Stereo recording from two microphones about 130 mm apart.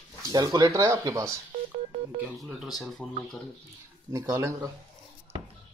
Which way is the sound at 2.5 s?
Centre (ahead or behind).